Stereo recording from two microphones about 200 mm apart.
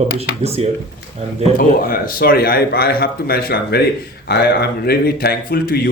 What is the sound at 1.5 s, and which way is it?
Speech, 45° left (ahead or behind).